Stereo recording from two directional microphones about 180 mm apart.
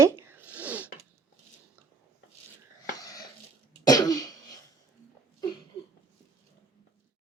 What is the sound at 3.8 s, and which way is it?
Cough, 20° left (ahead or behind).